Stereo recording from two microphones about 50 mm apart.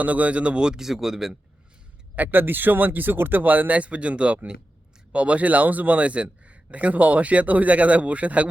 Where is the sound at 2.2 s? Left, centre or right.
Right.